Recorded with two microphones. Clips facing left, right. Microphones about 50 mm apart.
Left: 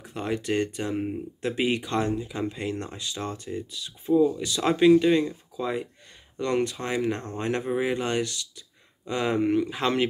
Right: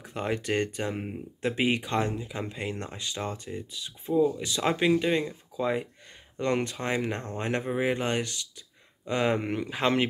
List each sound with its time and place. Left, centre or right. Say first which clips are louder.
0.0 s speech: left 1 dB; right
0.7 s speech: left 3 dB; right
9.8 s speech: even; right